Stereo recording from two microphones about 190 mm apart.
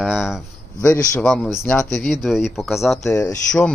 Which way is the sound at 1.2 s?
5° left (ahead or behind).